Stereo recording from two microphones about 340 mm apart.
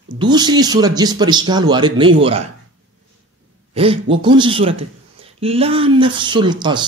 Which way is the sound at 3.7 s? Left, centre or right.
Centre.